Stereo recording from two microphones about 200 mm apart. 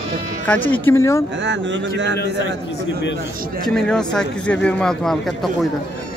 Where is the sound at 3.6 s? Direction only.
5° left (ahead or behind).